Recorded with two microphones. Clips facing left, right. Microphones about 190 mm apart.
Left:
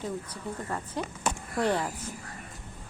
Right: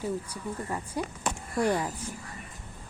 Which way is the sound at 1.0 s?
10° right (ahead or behind).